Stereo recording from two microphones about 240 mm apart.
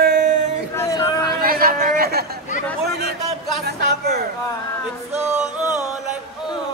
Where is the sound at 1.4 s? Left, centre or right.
Right.